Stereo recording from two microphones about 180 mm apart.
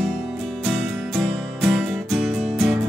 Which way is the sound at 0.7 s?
Centre (ahead or behind).